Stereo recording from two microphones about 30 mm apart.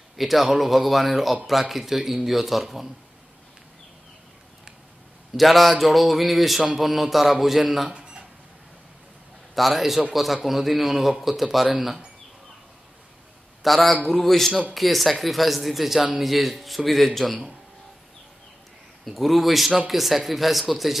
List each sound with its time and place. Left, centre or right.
0.1 s speech: centre
5.3 s speech: centre
7.9 s a sound: right
9.6 s speech: centre
13.6 s a man's voice: centre
19.0 s speech: centre